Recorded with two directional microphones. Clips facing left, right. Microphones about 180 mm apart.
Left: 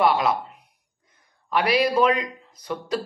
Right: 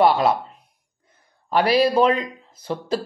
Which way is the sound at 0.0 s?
30° right (ahead or behind).